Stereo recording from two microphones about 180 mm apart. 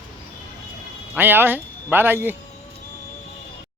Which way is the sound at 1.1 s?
10° right (ahead or behind).